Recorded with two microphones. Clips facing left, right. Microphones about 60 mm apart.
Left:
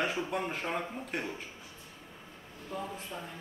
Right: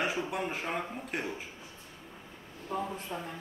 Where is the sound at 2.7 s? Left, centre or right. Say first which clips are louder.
Right 4 dB; right.